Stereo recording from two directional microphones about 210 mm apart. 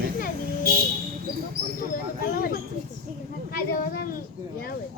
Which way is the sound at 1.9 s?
45° left (ahead or behind).